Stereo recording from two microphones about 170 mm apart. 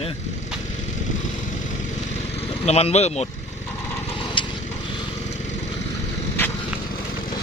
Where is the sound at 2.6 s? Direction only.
40° left (ahead or behind).